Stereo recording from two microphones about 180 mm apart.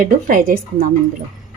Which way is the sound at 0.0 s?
50° right (ahead or behind).